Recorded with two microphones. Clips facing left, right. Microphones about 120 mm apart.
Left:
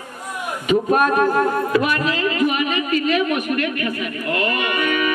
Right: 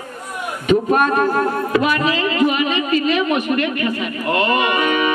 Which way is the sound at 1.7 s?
90° right.